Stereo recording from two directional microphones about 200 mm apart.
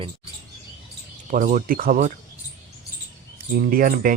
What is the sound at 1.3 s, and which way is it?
Speech, 40° right (ahead or behind).